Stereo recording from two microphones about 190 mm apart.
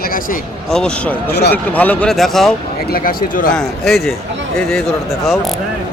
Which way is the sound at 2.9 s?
45° left (ahead or behind).